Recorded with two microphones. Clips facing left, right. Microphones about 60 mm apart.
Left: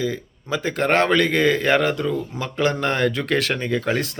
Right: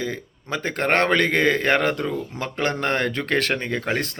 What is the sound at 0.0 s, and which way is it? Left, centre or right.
Speech, right.